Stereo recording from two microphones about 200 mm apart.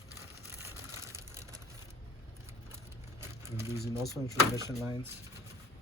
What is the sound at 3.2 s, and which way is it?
Crumpling, 10° right (ahead or behind).